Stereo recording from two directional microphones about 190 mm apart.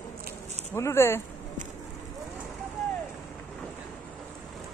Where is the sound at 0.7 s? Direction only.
15° left (ahead or behind).